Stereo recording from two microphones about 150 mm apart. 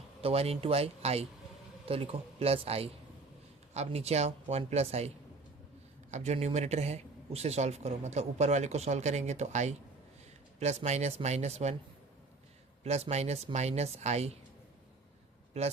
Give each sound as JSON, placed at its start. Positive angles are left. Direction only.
{"t": 0.2, "sound": "speech", "side_deg": -40}
{"t": 12.8, "sound": "speech", "side_deg": -45}
{"t": 15.6, "sound": "speech", "side_deg": -45}